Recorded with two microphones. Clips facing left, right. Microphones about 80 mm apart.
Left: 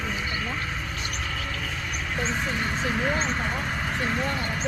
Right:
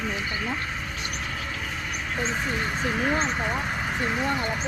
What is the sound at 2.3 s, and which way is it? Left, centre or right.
Speech, centre.